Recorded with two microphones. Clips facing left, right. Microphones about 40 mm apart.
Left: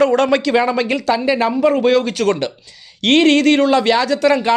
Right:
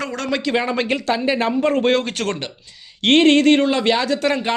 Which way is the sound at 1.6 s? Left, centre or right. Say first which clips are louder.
Left 5 dB; right.